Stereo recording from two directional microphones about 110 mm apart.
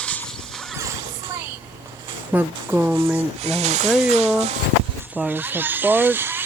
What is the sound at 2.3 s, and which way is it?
Speech, 15° right (ahead or behind).